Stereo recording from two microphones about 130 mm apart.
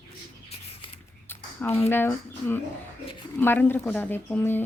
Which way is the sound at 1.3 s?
15° left (ahead or behind).